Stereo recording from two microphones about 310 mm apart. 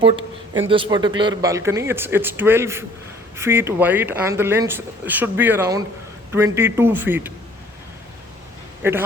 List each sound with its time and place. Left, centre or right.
0.0 s speech: centre
8.8 s speech: centre